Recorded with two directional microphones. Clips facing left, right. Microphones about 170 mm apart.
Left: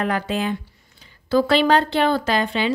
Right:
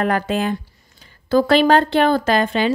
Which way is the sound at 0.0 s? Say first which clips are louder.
Right 3 dB; 50° right (ahead or behind).